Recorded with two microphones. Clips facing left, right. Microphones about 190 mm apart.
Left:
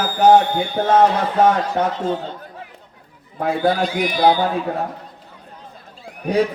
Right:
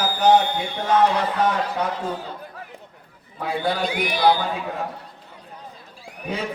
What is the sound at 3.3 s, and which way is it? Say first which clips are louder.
A man's voice: left 6 dB; 45° left (ahead or behind).